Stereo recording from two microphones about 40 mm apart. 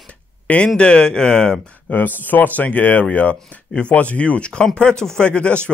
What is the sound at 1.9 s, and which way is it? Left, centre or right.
A man's voice, left.